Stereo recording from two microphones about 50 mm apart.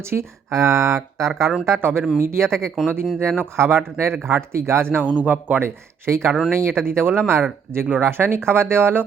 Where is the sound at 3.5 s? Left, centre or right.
Right.